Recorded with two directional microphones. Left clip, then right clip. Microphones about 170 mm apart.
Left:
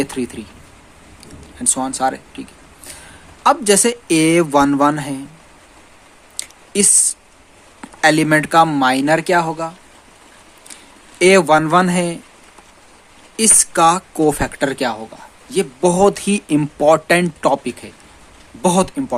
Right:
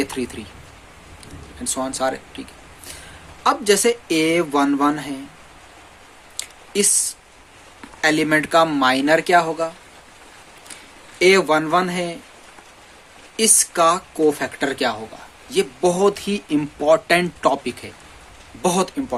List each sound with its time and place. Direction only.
0.0 s speech: 40° left (ahead or behind)
1.6 s speech: 45° left (ahead or behind)
3.4 s speech: 45° left (ahead or behind)
6.3 s a sound: 45° left (ahead or behind)
8.0 s speech: 45° left (ahead or behind)
11.2 s speech: 45° left (ahead or behind)
13.3 s speech: 45° left (ahead or behind)